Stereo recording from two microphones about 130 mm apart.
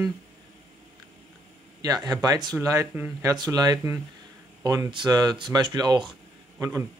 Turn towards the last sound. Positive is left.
turn(degrees=-20)  # may be behind; listen again after turning